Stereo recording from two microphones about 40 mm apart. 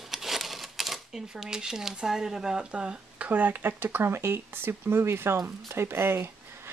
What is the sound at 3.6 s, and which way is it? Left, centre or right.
Speech, right.